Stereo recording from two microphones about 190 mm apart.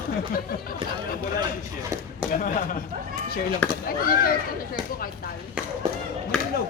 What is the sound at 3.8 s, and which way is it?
Speech, 50° left (ahead or behind).